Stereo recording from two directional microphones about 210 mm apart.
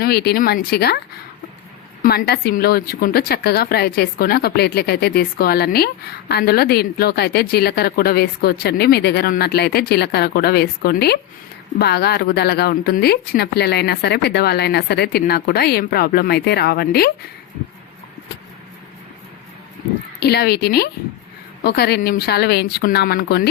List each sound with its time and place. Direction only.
0.0 s a woman's voice: 50° left (ahead or behind)
2.0 s a woman's voice: 50° left (ahead or behind)
20.1 s a woman's voice: 50° left (ahead or behind)